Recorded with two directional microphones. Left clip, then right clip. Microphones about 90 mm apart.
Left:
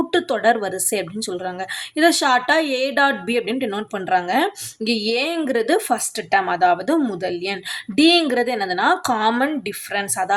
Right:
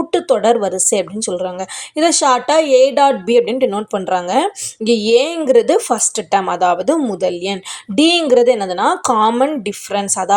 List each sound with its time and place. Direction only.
0.1 s a woman's voice: 30° right (ahead or behind)
4.0 s a woman's voice: 45° right (ahead or behind)